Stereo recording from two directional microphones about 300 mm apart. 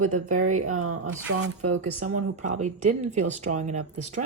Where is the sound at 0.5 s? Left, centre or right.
Right.